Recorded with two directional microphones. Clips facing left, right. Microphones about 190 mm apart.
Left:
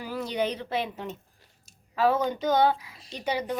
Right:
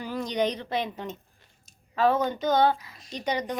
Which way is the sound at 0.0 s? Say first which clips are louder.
Right 2 dB; 5° left (ahead or behind).